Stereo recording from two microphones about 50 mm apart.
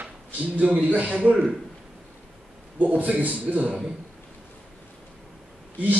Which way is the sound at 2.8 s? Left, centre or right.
Right.